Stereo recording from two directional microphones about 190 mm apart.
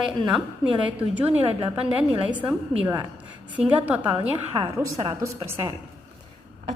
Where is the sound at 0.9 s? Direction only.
10° right (ahead or behind).